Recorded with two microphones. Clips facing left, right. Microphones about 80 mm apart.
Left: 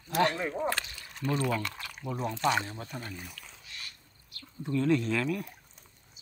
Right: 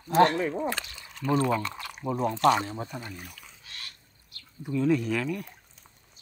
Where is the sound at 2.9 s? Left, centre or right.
Centre.